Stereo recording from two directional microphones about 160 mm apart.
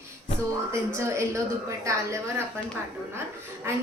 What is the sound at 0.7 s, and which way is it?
A woman's voice, 15° right (ahead or behind).